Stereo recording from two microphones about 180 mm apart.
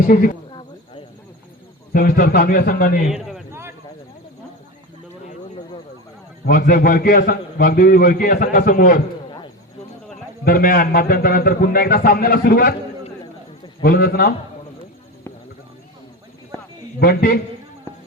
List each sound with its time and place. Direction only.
0.1 s a man's voice: 45° left (ahead or behind)
1.9 s a man's voice: 55° left (ahead or behind)
3.1 s a man's voice: centre (ahead or behind)
6.4 s a man's voice: 55° left (ahead or behind)
10.4 s a man's voice: 55° left (ahead or behind)
13.8 s a man's voice: 60° left (ahead or behind)
17.0 s a man's voice: 55° left (ahead or behind)